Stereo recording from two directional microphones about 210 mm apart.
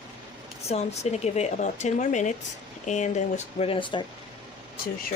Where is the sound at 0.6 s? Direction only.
30° left (ahead or behind).